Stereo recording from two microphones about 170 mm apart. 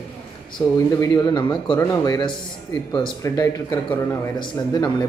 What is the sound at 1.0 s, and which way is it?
Speech, 20° left (ahead or behind).